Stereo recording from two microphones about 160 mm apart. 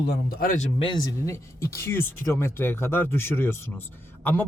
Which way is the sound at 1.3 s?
20° left (ahead or behind).